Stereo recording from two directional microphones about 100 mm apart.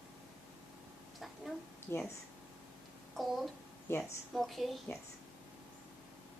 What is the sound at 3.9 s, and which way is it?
Speech, 25° left (ahead or behind).